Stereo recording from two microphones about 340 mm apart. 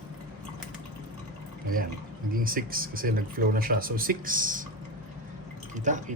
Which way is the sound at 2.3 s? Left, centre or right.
Right.